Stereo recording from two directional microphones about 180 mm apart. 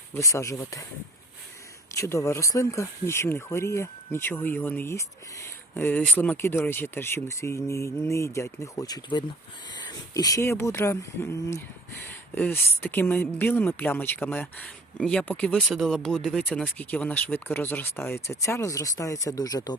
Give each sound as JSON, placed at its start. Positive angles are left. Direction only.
{"t": 0.1, "sound": "speech", "side_deg": 15}
{"t": 2.0, "sound": "speech", "side_deg": 15}